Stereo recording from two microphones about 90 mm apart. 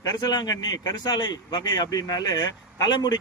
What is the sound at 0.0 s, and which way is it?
Speech, 45° left (ahead or behind).